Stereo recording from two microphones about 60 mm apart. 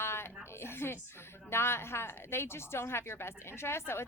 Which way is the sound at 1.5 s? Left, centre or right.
Left.